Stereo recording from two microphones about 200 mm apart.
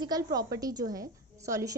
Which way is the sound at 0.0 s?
20° right (ahead or behind).